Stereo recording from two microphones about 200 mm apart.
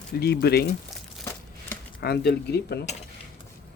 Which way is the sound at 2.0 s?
55° left (ahead or behind).